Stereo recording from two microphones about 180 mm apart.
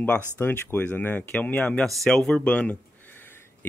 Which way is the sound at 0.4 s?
10° left (ahead or behind).